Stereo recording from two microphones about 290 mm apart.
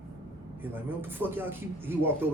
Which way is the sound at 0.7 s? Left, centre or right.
Centre.